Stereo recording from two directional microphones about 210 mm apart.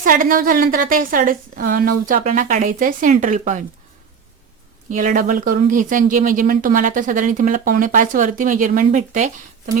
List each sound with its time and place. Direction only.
0.0 s speech: 40° right (ahead or behind)
4.9 s speech: 40° right (ahead or behind)